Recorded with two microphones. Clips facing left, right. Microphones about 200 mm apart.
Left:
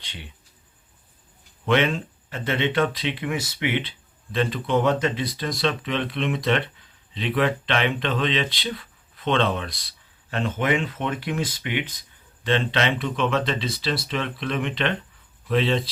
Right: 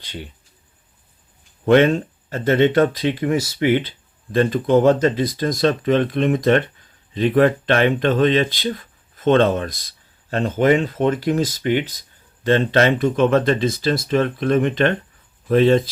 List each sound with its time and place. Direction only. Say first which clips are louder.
0.0 s speech: right 9 dB; 40° right (ahead or behind)
1.6 s speech: right 8 dB; 45° right (ahead or behind)